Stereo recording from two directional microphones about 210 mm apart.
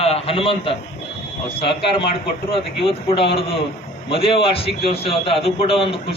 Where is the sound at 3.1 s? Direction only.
25° left (ahead or behind).